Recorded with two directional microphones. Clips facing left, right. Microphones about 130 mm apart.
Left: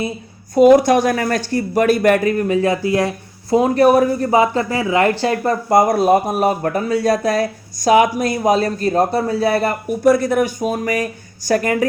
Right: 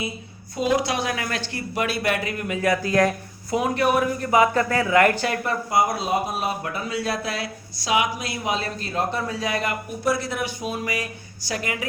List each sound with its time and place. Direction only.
0.5 s speech: 50° left (ahead or behind); by 5.5 s 30° left (ahead or behind)
5.6 s speech: 50° left (ahead or behind)